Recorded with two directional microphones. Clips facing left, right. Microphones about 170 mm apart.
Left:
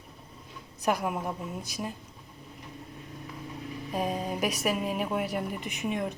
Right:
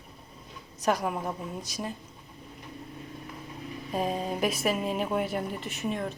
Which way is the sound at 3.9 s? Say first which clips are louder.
Right 1 dB; 5° left (ahead or behind).